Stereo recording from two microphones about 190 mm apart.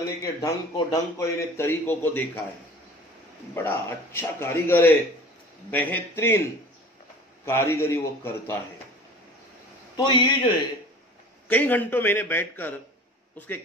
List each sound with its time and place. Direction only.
0.2 s a man's voice: 20° left (ahead or behind)
3.5 s a man's voice: 10° left (ahead or behind)
7.4 s a man's voice: 15° left (ahead or behind)
9.9 s a man's voice: 20° left (ahead or behind)
11.4 s a man's voice: 10° left (ahead or behind)